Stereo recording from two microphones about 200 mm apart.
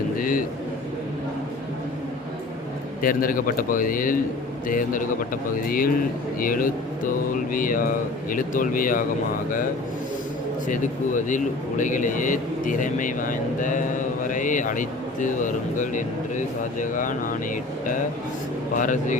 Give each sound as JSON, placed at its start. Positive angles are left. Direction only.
{"t": 0.2, "sound": "a sound", "side_deg": 45}
{"t": 3.0, "sound": "speech", "side_deg": 45}
{"t": 10.7, "sound": "a man's voice", "side_deg": 40}
{"t": 18.8, "sound": "a man's voice", "side_deg": 40}